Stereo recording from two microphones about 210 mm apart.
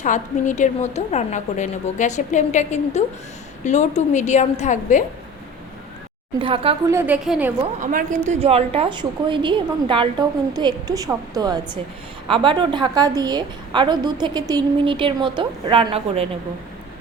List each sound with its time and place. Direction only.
0.0 s a woman's voice: 35° left (ahead or behind)
6.4 s a woman's voice: 25° right (ahead or behind)
6.8 s a woman's voice: 10° right (ahead or behind)
7.6 s a woman's voice: 40° right (ahead or behind)